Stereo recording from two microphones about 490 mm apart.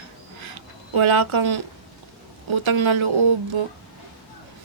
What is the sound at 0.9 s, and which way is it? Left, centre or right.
Speech, right.